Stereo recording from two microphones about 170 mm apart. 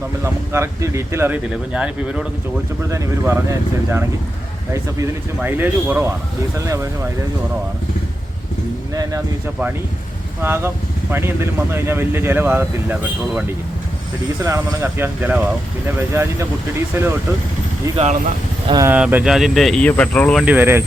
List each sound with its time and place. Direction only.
0.5 s speech: 15° right (ahead or behind)
4.7 s speech: 15° right (ahead or behind)
10.4 s speech: 15° right (ahead or behind)
14.4 s speech: 15° right (ahead or behind)
17.9 s speech: 40° right (ahead or behind)
18.7 s speech: 20° right (ahead or behind)
18.9 s speech: 5° right (ahead or behind)
20.4 s speech: 10° right (ahead or behind)